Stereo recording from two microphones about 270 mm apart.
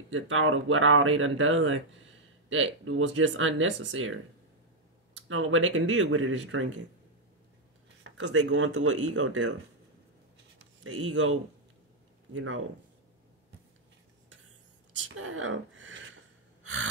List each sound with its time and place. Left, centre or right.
0.1 s speech: right
5.3 s speech: right
8.0 s speech: right
10.6 s speech: right
12.4 s speech: right
15.1 s speech: right